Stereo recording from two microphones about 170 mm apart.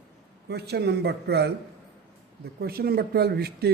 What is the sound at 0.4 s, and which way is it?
A man's voice, 75° right (ahead or behind).